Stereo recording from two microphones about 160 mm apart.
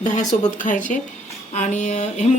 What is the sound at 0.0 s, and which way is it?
Speech, 50° left (ahead or behind).